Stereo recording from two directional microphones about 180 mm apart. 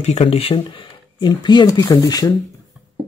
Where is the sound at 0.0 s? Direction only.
35° left (ahead or behind); by 2.3 s 20° left (ahead or behind).